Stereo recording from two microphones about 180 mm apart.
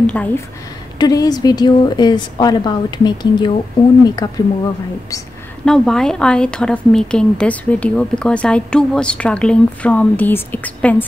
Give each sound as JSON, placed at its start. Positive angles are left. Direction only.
{"t": 0.0, "sound": "speech", "side_deg": 5}
{"t": 0.9, "sound": "a woman's voice", "side_deg": 20}
{"t": 5.7, "sound": "a woman's voice", "side_deg": 5}